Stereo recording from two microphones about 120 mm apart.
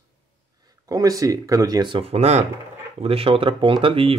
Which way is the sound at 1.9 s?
60° right (ahead or behind).